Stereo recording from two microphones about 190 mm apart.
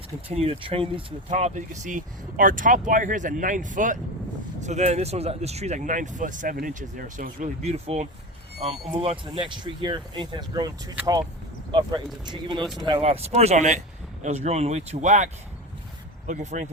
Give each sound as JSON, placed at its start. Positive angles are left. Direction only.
{"t": 0.3, "sound": "speech", "side_deg": -30}